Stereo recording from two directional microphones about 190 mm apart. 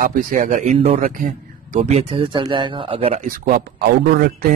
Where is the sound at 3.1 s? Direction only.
40° right (ahead or behind).